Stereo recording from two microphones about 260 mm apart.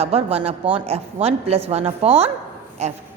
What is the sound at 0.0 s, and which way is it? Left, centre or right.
A woman's voice, right.